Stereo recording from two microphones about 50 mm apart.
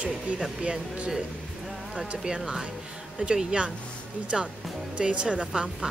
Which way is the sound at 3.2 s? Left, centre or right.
Right.